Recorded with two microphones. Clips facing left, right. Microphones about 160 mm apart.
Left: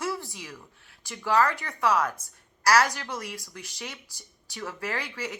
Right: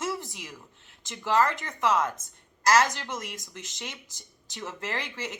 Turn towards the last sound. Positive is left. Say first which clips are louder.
# left 1 dB
turn(degrees=-20)  # may be behind; listen again after turning